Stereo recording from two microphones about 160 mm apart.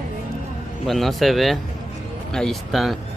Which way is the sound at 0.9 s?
Centre (ahead or behind).